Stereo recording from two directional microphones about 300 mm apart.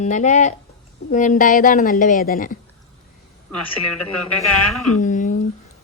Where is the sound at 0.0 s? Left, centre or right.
Left.